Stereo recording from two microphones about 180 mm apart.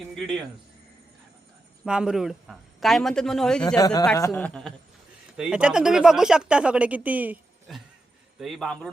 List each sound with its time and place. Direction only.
0.1 s speech: centre (ahead or behind)
1.8 s speech: 5° right (ahead or behind)
3.8 s a man's voice: 20° left (ahead or behind)
5.4 s speech: 5° right (ahead or behind)